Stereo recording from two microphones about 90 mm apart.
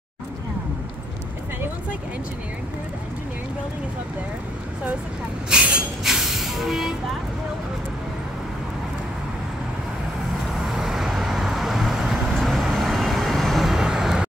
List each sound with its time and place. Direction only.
5.5 s vehicle: 10° right (ahead or behind)
10.7 s vehicle: 5° right (ahead or behind)